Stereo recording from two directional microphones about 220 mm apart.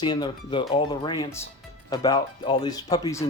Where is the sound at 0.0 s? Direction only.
20° left (ahead or behind).